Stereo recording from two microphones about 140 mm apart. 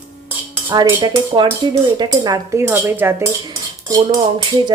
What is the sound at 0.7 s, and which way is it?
Cutlery, 30° right (ahead or behind).